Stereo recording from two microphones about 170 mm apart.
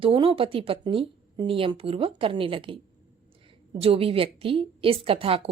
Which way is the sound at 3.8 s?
35° right (ahead or behind).